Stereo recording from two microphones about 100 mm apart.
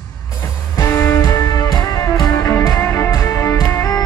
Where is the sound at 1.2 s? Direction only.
40° left (ahead or behind).